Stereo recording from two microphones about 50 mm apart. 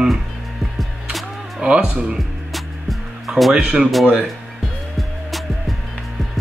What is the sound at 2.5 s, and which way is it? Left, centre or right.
Music, centre.